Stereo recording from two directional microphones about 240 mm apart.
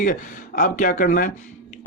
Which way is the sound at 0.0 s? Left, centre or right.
Left.